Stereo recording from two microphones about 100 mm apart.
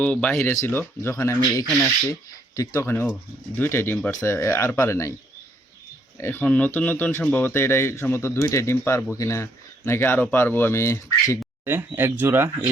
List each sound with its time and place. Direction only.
0.0 s a man's voice: 15° left (ahead or behind); by 2.9 s 35° left (ahead or behind)
3.5 s a man's voice: 20° left (ahead or behind)
6.1 s a man's voice: 25° left (ahead or behind)
11.6 s speech: 20° right (ahead or behind)